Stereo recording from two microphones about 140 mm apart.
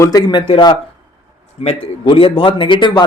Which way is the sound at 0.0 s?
25° left (ahead or behind).